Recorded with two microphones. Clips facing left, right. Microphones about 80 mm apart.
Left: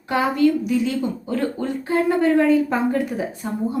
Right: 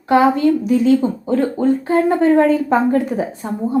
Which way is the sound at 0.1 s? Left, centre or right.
Right.